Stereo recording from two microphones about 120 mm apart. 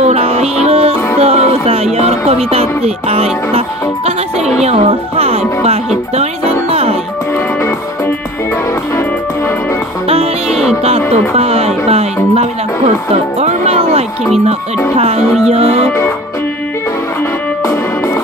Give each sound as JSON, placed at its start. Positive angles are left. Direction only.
{"t": 0.0, "sound": "music", "side_deg": -55}
{"t": 4.6, "sound": "speech", "side_deg": -60}
{"t": 10.5, "sound": "music", "side_deg": -5}
{"t": 10.8, "sound": "speech", "side_deg": -55}